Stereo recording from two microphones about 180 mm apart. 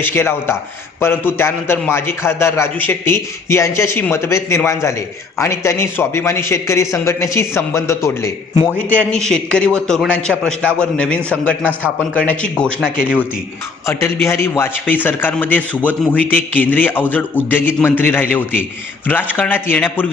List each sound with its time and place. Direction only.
0.0 s a man's voice: 15° left (ahead or behind)
9.1 s a man's voice: 5° left (ahead or behind)
13.8 s a man's voice: 15° left (ahead or behind)